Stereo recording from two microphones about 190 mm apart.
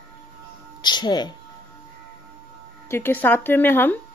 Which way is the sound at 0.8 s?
20° left (ahead or behind).